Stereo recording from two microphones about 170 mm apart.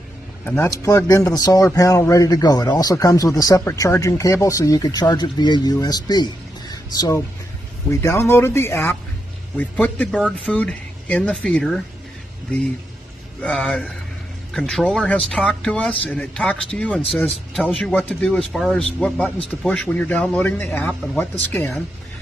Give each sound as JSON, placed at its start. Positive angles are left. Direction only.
{"t": 0.5, "sound": "speech", "side_deg": 15}
{"t": 13.4, "sound": "speech", "side_deg": 5}